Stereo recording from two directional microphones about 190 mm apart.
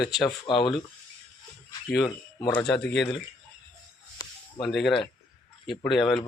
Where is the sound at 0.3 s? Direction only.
25° left (ahead or behind).